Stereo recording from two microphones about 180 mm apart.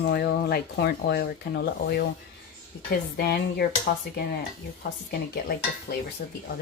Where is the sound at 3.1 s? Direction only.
60° left (ahead or behind).